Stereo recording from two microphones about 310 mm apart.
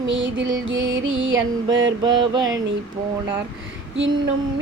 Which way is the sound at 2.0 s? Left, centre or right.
Centre.